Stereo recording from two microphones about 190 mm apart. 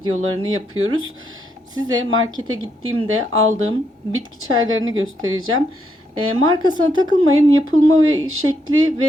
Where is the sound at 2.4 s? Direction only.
90° right.